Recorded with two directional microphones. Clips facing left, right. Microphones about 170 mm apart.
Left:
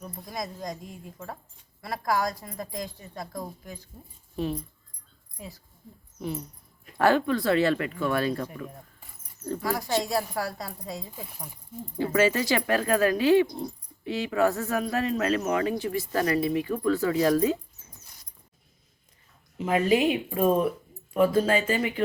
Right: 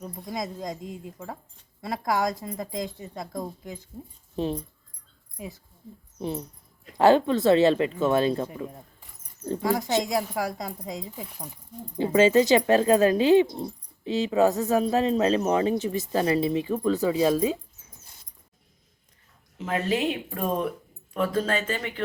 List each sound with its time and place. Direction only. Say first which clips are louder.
0.0 s speech: right 3 dB; 20° right (ahead or behind)
19.5 s speech: left 4 dB; 15° left (ahead or behind)